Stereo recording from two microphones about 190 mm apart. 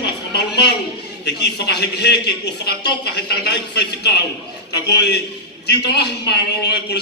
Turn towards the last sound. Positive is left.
turn(degrees=65)  # may be behind; listen again after turning